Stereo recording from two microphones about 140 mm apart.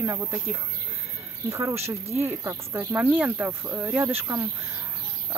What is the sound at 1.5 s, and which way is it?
Speech, 20° right (ahead or behind).